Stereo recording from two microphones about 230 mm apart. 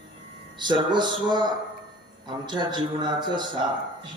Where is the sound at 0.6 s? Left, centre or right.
Centre.